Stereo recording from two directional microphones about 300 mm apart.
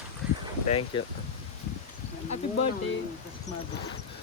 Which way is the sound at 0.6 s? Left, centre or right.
Centre.